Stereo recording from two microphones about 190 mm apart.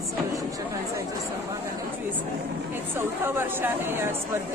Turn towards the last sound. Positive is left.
turn(degrees=-10)  # may be behind; listen again after turning